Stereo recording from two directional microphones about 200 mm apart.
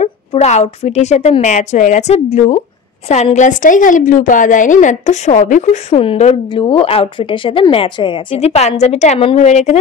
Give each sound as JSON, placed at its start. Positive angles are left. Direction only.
{"t": 0.0, "sound": "a woman's voice", "side_deg": 35}